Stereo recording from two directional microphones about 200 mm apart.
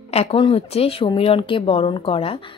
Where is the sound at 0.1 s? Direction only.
30° left (ahead or behind).